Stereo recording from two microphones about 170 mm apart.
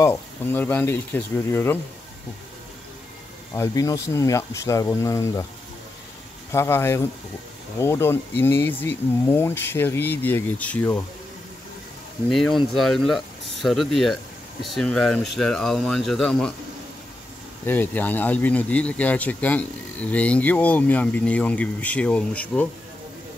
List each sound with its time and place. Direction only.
0.0 s speech: 15° left (ahead or behind)
3.5 s speech: 20° left (ahead or behind)
6.5 s speech: 15° left (ahead or behind)
12.3 s speech: centre (ahead or behind)
17.6 s speech: 10° left (ahead or behind)